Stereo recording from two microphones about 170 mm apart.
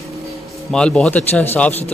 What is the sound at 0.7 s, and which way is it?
A man's voice, 5° left (ahead or behind).